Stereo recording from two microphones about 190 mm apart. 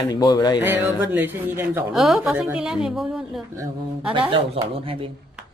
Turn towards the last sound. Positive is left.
turn(degrees=-30)  # may be behind; listen again after turning